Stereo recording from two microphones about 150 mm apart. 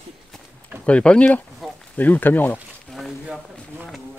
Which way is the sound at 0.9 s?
10° left (ahead or behind).